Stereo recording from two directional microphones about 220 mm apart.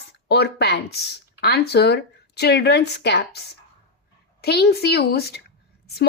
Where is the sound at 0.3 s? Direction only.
50° left (ahead or behind).